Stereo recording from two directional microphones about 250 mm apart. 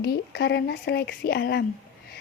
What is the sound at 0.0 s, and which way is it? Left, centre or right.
Speech, left.